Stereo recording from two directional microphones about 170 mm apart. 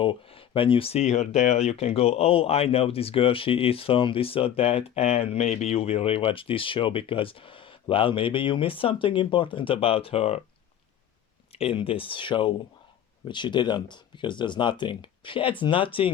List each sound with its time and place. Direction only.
0.0 s speech: 30° left (ahead or behind)
11.5 s speech: 35° left (ahead or behind)